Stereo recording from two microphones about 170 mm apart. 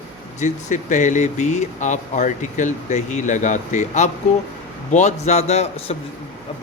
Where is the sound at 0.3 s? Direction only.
45° left (ahead or behind).